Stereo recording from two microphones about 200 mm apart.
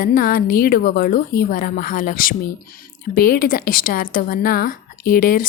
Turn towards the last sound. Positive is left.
turn(degrees=45)  # may be behind; listen again after turning